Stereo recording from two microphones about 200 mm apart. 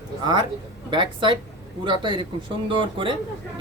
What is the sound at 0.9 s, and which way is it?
Speech, 25° right (ahead or behind).